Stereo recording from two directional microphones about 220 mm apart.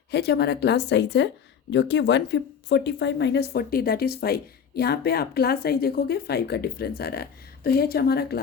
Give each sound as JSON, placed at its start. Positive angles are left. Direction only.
{"t": 0.1, "sound": "speech", "side_deg": 50}